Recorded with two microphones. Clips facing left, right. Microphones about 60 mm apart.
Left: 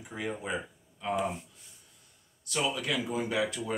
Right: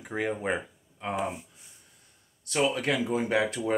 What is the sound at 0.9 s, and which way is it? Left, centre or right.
Speech, right.